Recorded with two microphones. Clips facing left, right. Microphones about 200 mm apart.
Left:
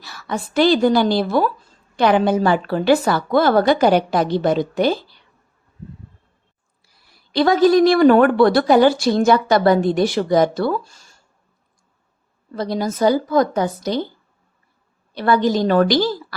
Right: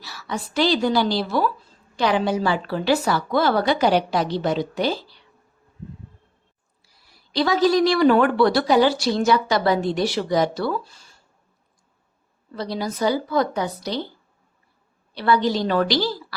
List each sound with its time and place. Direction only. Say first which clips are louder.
0.0 s a woman's voice: left 4 dB; 50° left (ahead or behind)
6.8 s a woman's voice: left 1 dB; 55° left (ahead or behind)
12.5 s a woman's voice: left 5 dB; 50° left (ahead or behind)
15.1 s a woman's voice: left 3 dB; 50° left (ahead or behind)